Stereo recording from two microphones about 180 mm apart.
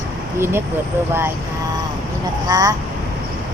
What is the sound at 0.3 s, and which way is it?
Speech, 15° right (ahead or behind).